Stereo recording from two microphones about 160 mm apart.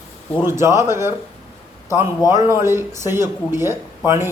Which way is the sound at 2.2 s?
15° right (ahead or behind).